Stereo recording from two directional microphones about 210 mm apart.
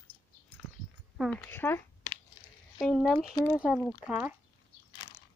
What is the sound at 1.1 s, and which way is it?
Speech, 5° left (ahead or behind).